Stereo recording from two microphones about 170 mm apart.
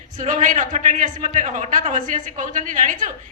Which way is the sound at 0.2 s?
45° right (ahead or behind).